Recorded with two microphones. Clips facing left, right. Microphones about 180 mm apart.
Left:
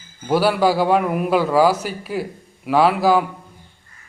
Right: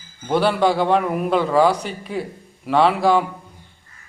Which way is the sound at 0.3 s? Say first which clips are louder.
Left 1 dB; 5° left (ahead or behind).